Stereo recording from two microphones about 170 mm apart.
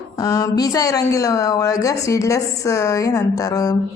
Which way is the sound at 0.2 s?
20° left (ahead or behind).